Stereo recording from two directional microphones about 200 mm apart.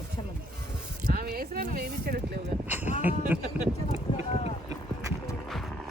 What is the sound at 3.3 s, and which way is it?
Speech, 10° right (ahead or behind).